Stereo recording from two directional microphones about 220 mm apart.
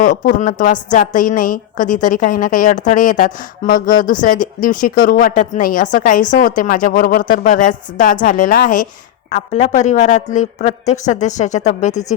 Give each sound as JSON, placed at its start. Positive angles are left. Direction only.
{"t": 0.0, "sound": "a woman's voice", "side_deg": 35}